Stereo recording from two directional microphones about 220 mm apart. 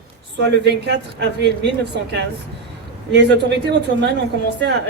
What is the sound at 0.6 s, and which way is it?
A woman's voice, 50° right (ahead or behind).